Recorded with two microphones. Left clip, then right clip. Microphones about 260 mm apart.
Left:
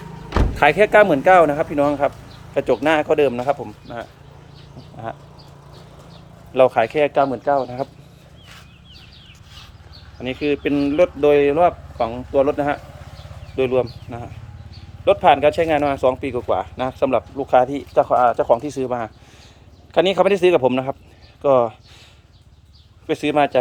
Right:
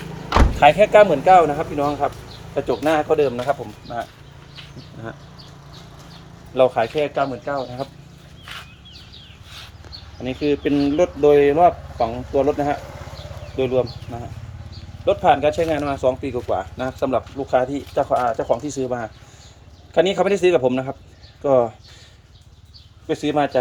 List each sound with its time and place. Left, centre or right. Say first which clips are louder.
0.6 s speech: right 1 dB; centre
6.7 s speech: left 3 dB; centre
10.2 s speech: even; centre
15.0 s speech: left 2 dB; centre
23.0 s speech: left 2 dB; centre